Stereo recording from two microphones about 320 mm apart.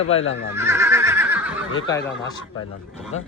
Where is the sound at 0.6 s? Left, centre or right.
Centre.